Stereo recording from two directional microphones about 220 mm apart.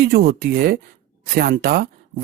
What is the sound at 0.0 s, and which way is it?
Speech, 45° right (ahead or behind).